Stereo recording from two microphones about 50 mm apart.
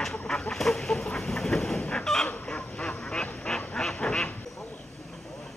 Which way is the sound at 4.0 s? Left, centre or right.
Left.